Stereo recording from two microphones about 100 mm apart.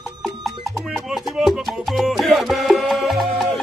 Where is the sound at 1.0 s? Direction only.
5° right (ahead or behind).